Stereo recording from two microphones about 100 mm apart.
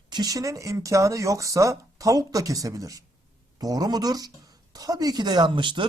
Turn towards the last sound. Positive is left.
turn(degrees=-55)  # may be behind; listen again after turning